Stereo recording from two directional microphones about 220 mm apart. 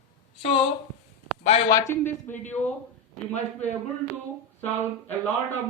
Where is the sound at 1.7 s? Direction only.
15° left (ahead or behind).